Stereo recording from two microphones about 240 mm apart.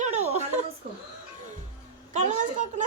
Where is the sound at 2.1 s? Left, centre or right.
Right.